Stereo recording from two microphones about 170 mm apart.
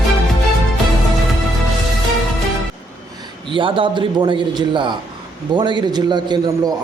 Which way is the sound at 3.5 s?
30° right (ahead or behind).